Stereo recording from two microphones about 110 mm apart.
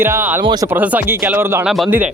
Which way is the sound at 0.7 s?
15° right (ahead or behind).